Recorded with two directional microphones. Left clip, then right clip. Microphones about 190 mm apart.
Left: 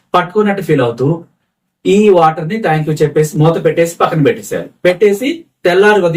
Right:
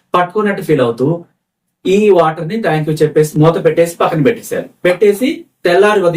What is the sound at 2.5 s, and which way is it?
Speech, 5° right (ahead or behind).